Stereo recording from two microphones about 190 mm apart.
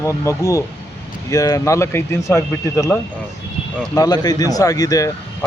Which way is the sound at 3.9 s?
20° left (ahead or behind).